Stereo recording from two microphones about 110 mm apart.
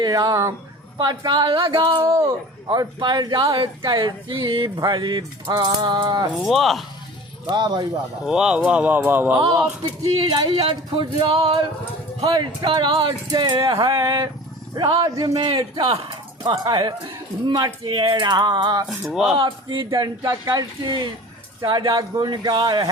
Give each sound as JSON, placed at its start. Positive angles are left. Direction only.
{"t": 0.0, "sound": "speech", "side_deg": -35}
{"t": 6.3, "sound": "speech", "side_deg": 0}
{"t": 7.4, "sound": "speech", "side_deg": -40}
{"t": 8.2, "sound": "speech", "side_deg": -5}
{"t": 10.1, "sound": "speech", "side_deg": -60}
{"t": 12.2, "sound": "speech", "side_deg": -50}
{"t": 14.8, "sound": "speech", "side_deg": -40}
{"t": 15.4, "sound": "speech", "side_deg": -55}
{"t": 16.4, "sound": "speech", "side_deg": -40}
{"t": 17.8, "sound": "speech", "side_deg": -50}
{"t": 18.9, "sound": "speech", "side_deg": 0}
{"t": 19.4, "sound": "speech", "side_deg": -50}